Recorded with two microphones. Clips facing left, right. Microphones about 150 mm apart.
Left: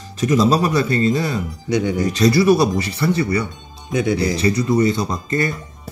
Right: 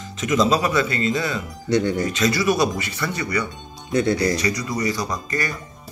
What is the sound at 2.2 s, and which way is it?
Speech, 30° left (ahead or behind).